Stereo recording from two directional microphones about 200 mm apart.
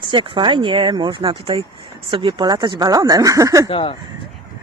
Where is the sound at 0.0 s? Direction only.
25° right (ahead or behind).